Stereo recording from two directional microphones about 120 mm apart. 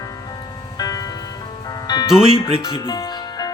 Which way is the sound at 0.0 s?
30° left (ahead or behind).